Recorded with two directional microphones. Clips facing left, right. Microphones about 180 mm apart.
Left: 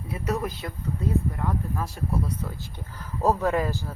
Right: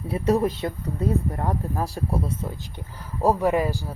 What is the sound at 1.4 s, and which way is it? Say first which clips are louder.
Speech: right 3 dB; 40° right (ahead or behind).